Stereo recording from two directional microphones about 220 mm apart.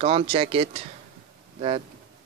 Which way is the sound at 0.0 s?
25° right (ahead or behind).